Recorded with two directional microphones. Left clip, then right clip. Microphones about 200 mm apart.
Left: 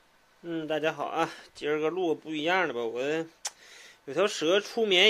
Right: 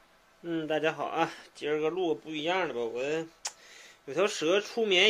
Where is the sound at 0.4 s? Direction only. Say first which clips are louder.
Even; 5° left (ahead or behind).